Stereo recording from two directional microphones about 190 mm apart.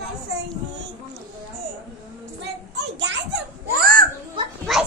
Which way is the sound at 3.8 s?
50° right (ahead or behind).